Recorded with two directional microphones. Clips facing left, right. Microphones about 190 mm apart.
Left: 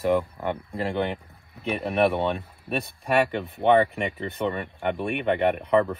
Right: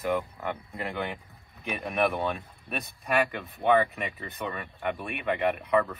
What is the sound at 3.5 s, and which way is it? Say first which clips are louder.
Speech: left 4 dB; 30° left (ahead or behind).